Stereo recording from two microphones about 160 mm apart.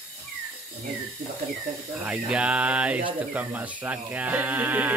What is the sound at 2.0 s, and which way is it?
Speech, 5° right (ahead or behind).